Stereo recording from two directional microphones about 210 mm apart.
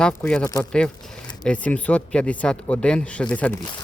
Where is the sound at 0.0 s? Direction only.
5° left (ahead or behind).